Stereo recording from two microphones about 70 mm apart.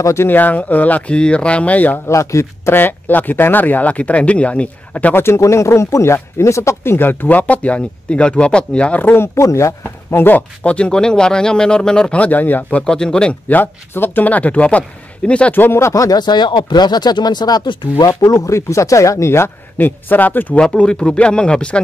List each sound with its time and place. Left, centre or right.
0.0 s speech: left
0.3 s speech: left
2.0 s speech: left; by 5.1 s centre
5.1 s speech: left; by 9.0 s centre
9.0 s speech: left
9.4 s speech: left
10.2 s speech: left
12.8 s speech: centre
13.5 s speech: left
15.5 s speech: left
15.9 s speech: left
16.2 s speech: left
18.5 s speech: left
20.6 s speech: centre